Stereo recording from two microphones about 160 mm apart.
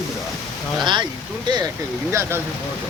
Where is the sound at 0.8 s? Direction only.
30° right (ahead or behind).